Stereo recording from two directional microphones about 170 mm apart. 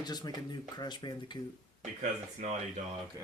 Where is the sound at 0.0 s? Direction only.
25° left (ahead or behind).